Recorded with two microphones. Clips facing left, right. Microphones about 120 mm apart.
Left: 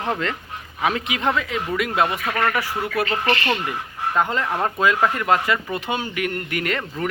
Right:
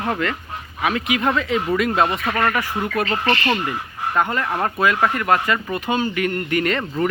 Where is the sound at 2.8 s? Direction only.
10° left (ahead or behind).